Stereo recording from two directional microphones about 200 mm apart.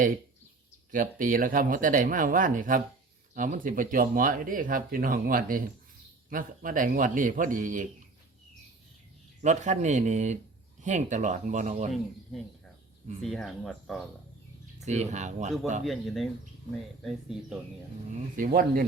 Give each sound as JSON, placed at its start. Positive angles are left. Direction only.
{"t": 0.9, "sound": "speech", "side_deg": -40}
{"t": 9.4, "sound": "speech", "side_deg": -35}
{"t": 13.2, "sound": "speech", "side_deg": 0}
{"t": 14.8, "sound": "speech", "side_deg": -35}
{"t": 15.8, "sound": "speech", "side_deg": 0}
{"t": 18.3, "sound": "speech", "side_deg": -45}